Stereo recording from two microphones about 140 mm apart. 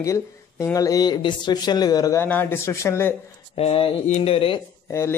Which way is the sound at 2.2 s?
15° left (ahead or behind).